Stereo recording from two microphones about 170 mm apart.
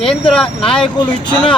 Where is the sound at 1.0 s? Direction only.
25° left (ahead or behind).